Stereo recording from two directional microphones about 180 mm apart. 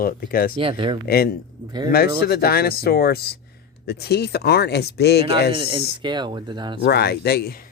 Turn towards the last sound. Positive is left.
turn(degrees=60)  # may be behind; listen again after turning